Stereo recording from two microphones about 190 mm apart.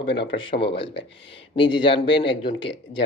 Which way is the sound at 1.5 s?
25° left (ahead or behind).